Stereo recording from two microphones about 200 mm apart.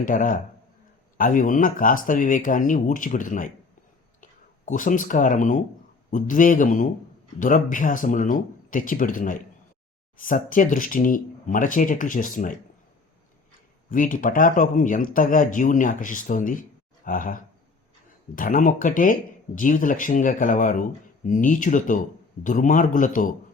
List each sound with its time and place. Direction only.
0.0 s speech: 40° left (ahead or behind)
13.9 s speech: 40° left (ahead or behind)